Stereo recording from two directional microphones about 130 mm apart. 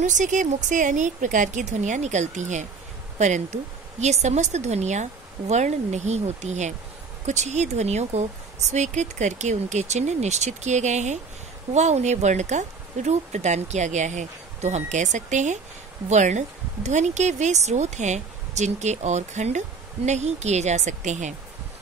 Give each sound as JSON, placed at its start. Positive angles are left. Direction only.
{"t": 0.0, "sound": "speech", "side_deg": -75}